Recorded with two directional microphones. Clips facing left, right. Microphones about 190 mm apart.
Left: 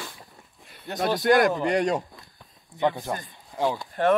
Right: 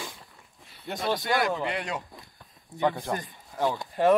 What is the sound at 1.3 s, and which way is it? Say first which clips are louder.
Speech: left 6 dB; 45° left (ahead or behind).